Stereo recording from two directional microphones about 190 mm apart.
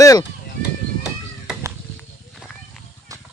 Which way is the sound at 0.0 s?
15° left (ahead or behind).